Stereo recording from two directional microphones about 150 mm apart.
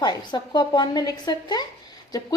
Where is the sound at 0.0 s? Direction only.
30° left (ahead or behind).